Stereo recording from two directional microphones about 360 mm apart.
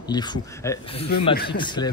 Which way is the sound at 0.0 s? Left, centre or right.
Centre.